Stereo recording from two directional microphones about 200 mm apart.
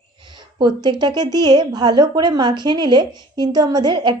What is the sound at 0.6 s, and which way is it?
A woman's voice, 20° right (ahead or behind).